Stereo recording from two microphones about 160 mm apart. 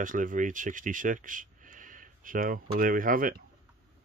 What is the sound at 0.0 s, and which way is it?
Speech, 55° right (ahead or behind).